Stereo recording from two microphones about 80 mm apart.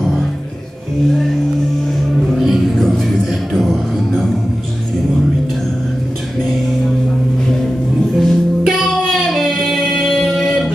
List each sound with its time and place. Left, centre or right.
2.2 s music: centre
8.2 s music: centre